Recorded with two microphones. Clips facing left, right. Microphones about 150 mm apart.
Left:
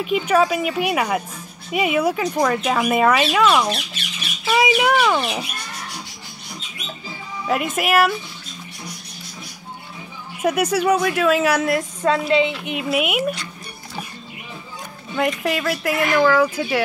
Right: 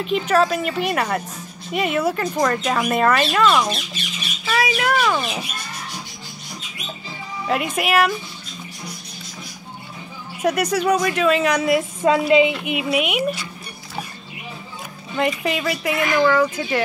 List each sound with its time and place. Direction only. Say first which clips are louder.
0.0 s speech: left 1 dB; 10° left (ahead or behind)
5.0 s speech: left 2 dB; 5° left (ahead or behind)
7.4 s speech: left 1 dB; centre (ahead or behind)
10.4 s speech: left 1 dB; 5° left (ahead or behind)
11.7 s a woman's voice: right 2 dB; 10° right (ahead or behind)
15.1 s speech: even; centre (ahead or behind)